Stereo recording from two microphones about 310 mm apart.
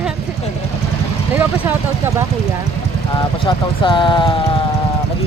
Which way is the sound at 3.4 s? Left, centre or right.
Centre.